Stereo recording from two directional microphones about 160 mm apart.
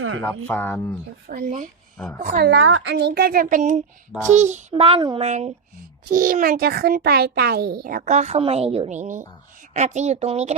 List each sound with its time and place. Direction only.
0.2 s speech: 10° left (ahead or behind)
1.3 s speech: 50° right (ahead or behind)
2.4 s a child's voice: 90° right; by 4.6 s 50° right (ahead or behind)
4.7 s a woman's voice: 35° right (ahead or behind)
6.1 s a child's voice: 60° right (ahead or behind); by 7.8 s 80° right
7.9 s speech: 55° right (ahead or behind)